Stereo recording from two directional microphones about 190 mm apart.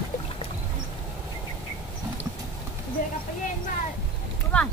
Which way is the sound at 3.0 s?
45° left (ahead or behind).